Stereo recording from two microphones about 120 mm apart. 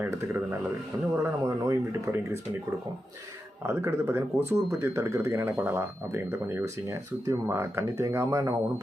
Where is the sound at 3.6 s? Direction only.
20° right (ahead or behind).